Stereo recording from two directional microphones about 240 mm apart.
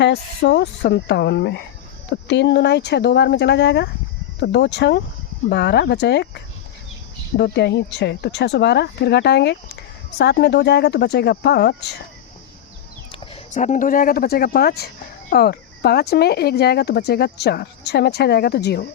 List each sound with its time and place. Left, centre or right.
0.0 s speech: left
13.1 s speech: left